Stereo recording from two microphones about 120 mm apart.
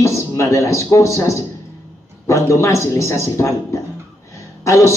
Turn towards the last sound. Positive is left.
turn(degrees=25)  # may be behind; listen again after turning